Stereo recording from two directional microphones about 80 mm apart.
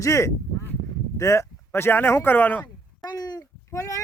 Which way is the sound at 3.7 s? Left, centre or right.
Left.